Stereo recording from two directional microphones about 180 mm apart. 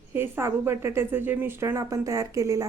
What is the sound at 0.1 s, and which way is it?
A woman's voice, 15° right (ahead or behind).